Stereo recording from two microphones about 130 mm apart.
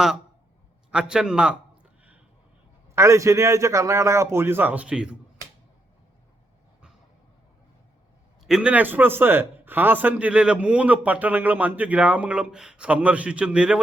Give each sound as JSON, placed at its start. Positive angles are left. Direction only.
{"t": 0.9, "sound": "a man's voice", "side_deg": -5}
{"t": 2.9, "sound": "a man's voice", "side_deg": -20}
{"t": 8.4, "sound": "a man's voice", "side_deg": -5}